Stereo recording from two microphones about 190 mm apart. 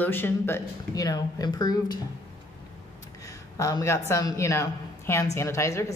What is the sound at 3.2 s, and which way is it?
A man's voice, 15° left (ahead or behind).